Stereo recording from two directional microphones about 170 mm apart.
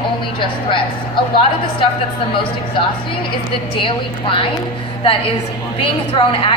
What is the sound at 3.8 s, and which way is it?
Speech, 30° left (ahead or behind).